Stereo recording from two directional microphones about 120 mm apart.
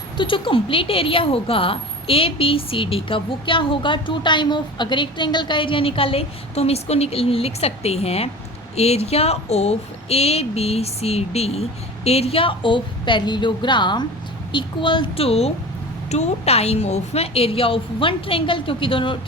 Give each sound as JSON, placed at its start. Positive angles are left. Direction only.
{"t": 0.2, "sound": "a woman's voice", "side_deg": 45}
{"t": 16.0, "sound": "speech", "side_deg": 70}